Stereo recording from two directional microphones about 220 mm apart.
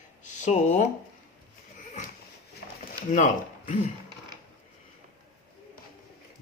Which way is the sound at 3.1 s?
35° left (ahead or behind).